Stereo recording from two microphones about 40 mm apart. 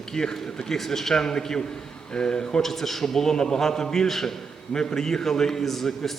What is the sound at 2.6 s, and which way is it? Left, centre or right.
A man's voice, centre.